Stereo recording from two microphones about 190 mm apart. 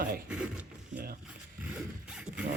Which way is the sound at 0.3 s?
5° right (ahead or behind).